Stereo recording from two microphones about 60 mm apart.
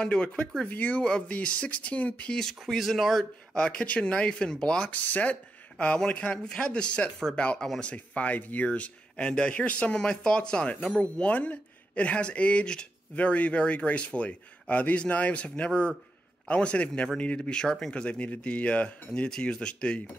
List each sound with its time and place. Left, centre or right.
0.0 s speech: centre
1.0 s speech: centre
2.6 s speech: centre
3.5 s speech: centre